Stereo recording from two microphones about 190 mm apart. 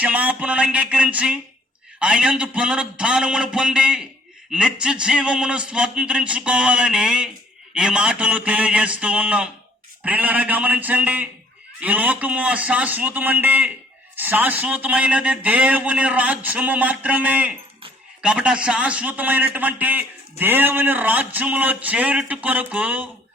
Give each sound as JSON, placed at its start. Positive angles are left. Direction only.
{"t": 0.0, "sound": "a man's voice", "side_deg": -10}